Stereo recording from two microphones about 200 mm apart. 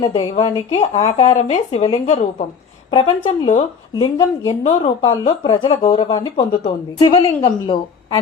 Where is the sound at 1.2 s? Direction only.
35° left (ahead or behind).